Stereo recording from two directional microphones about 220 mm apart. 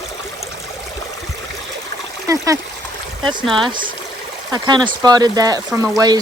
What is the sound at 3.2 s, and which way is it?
Speech, 20° right (ahead or behind).